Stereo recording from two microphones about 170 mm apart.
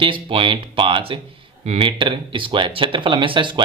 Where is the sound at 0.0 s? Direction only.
30° right (ahead or behind).